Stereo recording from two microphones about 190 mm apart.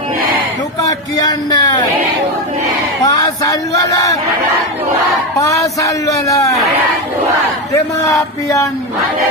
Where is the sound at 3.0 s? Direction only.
20° left (ahead or behind).